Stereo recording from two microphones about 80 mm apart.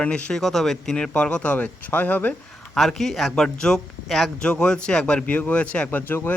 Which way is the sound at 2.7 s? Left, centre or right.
Centre.